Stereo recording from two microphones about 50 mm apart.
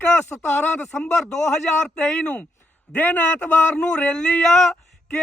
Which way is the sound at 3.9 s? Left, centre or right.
Centre.